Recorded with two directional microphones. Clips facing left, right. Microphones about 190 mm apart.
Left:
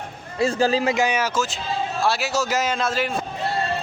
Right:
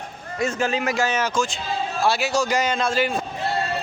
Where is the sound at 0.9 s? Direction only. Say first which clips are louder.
Left 1 dB; 15° left (ahead or behind).